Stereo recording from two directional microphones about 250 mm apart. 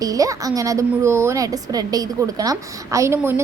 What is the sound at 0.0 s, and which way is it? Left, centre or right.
A woman's voice, centre.